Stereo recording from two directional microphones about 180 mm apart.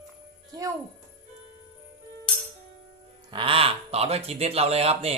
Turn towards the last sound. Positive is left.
turn(degrees=-35)  # may be behind; listen again after turning